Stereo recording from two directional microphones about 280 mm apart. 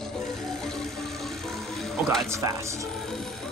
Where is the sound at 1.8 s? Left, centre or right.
Centre.